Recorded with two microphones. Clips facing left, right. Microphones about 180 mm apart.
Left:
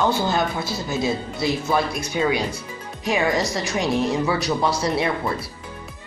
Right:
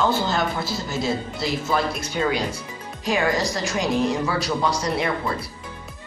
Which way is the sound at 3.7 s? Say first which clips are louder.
Left 1 dB; 20° left (ahead or behind).